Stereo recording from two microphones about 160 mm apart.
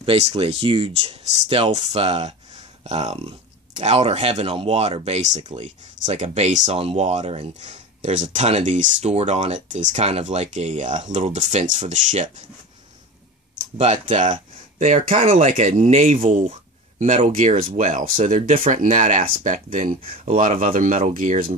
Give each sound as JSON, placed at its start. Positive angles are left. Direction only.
{"t": 0.0, "sound": "speech", "side_deg": -35}
{"t": 13.7, "sound": "speech", "side_deg": -45}